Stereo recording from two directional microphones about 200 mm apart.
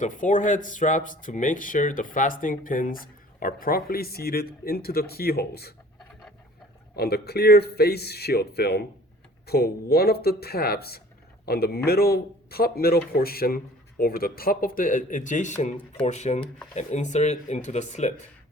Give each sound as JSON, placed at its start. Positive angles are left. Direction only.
{"t": 0.0, "sound": "speech", "side_deg": 40}
{"t": 6.9, "sound": "speech", "side_deg": 50}